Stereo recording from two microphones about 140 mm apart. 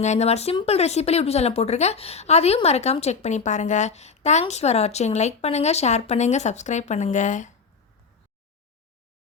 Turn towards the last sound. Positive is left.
turn(degrees=65)  # may be behind; listen again after turning